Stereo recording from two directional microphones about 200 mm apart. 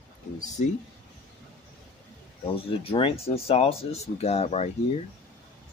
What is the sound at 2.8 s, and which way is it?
Speech, 30° left (ahead or behind).